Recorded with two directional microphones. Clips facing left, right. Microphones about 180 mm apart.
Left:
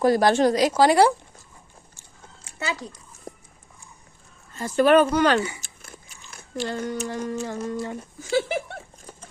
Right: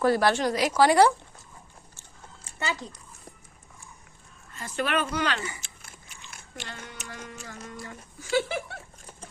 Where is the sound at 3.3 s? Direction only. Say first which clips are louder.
Left 11 dB; 40° left (ahead or behind).